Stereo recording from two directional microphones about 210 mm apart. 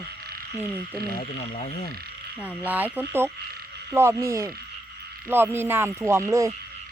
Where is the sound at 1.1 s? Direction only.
35° left (ahead or behind).